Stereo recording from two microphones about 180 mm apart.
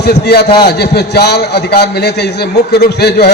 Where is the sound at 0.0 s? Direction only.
65° left (ahead or behind).